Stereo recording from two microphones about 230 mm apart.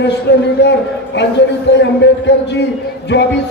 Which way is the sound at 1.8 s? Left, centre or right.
Left.